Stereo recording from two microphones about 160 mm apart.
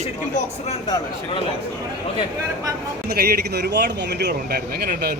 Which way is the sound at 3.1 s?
75° right (ahead or behind).